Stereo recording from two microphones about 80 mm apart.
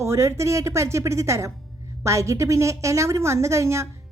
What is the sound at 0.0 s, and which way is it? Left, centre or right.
A woman's voice, right.